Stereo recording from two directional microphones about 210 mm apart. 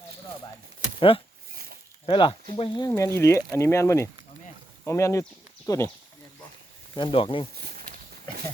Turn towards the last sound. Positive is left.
turn(degrees=-40)  # may be behind; listen again after turning